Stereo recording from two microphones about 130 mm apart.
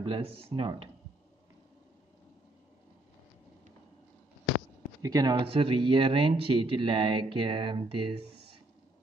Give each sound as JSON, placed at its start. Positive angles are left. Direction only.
{"t": 0.0, "sound": "speech", "side_deg": -50}
{"t": 5.0, "sound": "speech", "side_deg": -30}
{"t": 5.3, "sound": "speech", "side_deg": -45}